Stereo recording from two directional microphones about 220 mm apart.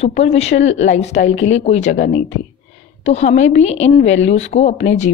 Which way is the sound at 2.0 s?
40° left (ahead or behind).